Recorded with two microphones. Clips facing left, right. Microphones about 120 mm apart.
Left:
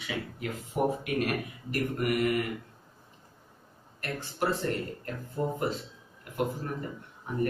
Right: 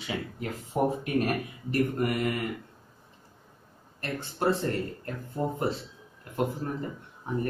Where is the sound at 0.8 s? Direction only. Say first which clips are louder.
Right 2 dB; 35° right (ahead or behind).